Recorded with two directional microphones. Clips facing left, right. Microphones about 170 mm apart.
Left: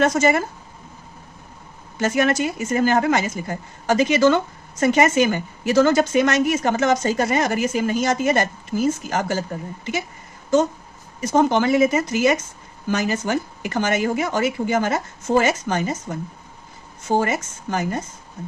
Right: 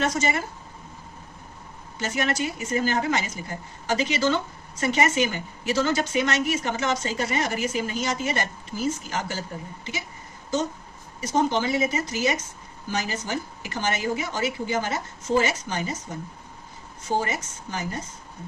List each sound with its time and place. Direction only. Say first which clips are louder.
0.0 s a woman's voice: left 7 dB; 50° left (ahead or behind)
2.0 s a woman's voice: left 7 dB; 50° left (ahead or behind)
11.2 s a woman's voice: left 6 dB; 55° left (ahead or behind)
17.2 s a woman's voice: left 7 dB; 50° left (ahead or behind)